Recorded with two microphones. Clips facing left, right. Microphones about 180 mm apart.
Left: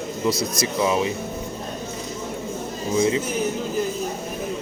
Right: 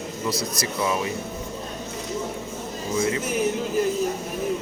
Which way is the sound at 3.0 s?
20° left (ahead or behind).